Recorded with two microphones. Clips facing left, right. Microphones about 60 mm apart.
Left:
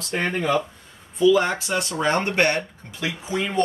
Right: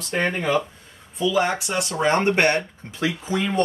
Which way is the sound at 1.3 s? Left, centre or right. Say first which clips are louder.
Left 1 dB; centre.